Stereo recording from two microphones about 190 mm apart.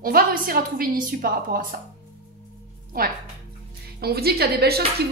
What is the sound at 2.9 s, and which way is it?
A woman's voice, 50° right (ahead or behind).